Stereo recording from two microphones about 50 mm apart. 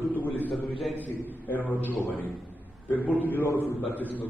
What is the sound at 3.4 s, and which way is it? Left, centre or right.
Speech, left.